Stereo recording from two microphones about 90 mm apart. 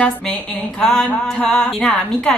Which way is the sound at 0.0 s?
10° left (ahead or behind).